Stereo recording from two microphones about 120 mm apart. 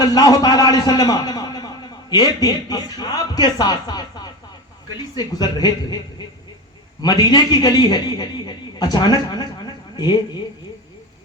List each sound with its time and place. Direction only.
0.0 s a man's voice: 35° left (ahead or behind)
5.1 s a man's voice: 35° left (ahead or behind)